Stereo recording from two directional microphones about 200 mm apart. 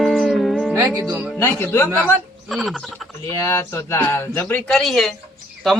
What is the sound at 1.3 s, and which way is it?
Speech, 10° left (ahead or behind).